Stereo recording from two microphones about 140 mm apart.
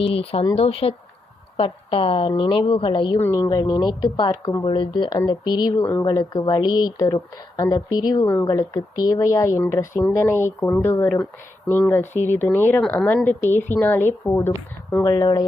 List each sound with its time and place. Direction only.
0.0 s a woman's voice: 45° left (ahead or behind)
3.2 s a woman's voice: 15° left (ahead or behind)
5.8 s a woman's voice: 15° left (ahead or behind)
6.1 s a woman's voice: 30° left (ahead or behind)
15.0 s a woman's voice: 30° left (ahead or behind)